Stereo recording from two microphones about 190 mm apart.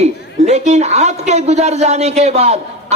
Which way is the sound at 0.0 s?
35° right (ahead or behind).